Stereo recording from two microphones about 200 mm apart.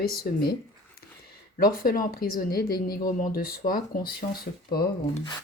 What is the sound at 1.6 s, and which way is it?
Speech, 50° left (ahead or behind).